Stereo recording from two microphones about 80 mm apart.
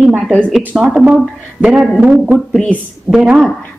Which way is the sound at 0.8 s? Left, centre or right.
Centre.